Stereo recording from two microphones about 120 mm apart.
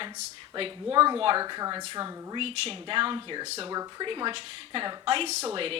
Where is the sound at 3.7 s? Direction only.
35° right (ahead or behind).